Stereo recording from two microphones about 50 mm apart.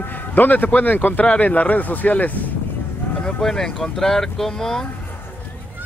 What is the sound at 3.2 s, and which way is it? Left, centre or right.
Speech, centre.